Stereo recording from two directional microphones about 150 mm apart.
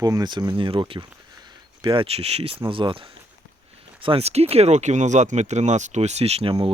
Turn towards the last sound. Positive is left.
turn(degrees=-40)  # may be behind; listen again after turning